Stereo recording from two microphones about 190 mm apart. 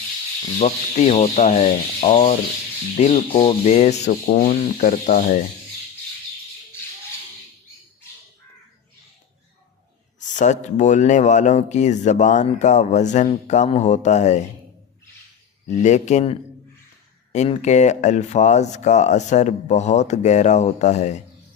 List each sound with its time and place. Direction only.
0.6 s speech: 35° left (ahead or behind)
10.2 s speech: 40° left (ahead or behind)
15.6 s speech: 40° left (ahead or behind)